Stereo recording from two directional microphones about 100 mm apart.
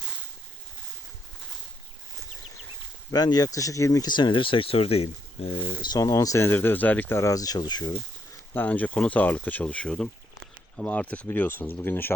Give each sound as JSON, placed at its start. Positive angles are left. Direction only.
{"t": 3.1, "sound": "speech", "side_deg": 40}
{"t": 4.1, "sound": "speech", "side_deg": 50}
{"t": 5.8, "sound": "speech", "side_deg": 40}
{"t": 7.2, "sound": "speech", "side_deg": 35}
{"t": 8.5, "sound": "speech", "side_deg": 15}